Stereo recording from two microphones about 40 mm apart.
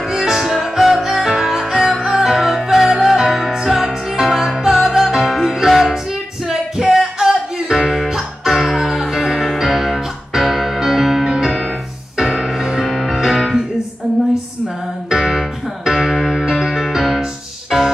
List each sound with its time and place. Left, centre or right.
0.0 s music: centre
8.5 s music: centre
11.3 s music: centre
12.8 s music: centre
13.1 s music: centre
15.0 s music: centre